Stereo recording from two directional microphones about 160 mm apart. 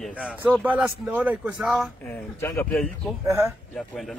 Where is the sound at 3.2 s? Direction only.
20° right (ahead or behind).